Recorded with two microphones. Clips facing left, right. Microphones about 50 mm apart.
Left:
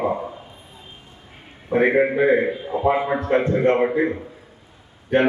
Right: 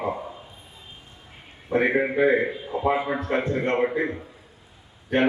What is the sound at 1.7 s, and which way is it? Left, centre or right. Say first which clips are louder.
A man's voice: left 4 dB; centre.